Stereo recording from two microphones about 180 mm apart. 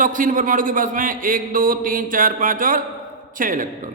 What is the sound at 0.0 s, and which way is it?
A man's voice, 45° right (ahead or behind).